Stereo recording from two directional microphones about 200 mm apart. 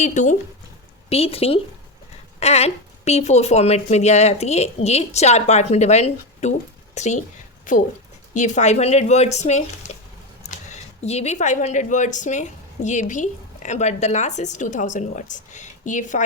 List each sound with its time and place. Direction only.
0.0 s a woman's voice: 35° left (ahead or behind)